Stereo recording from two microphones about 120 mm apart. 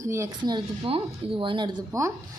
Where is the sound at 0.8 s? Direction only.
50° right (ahead or behind).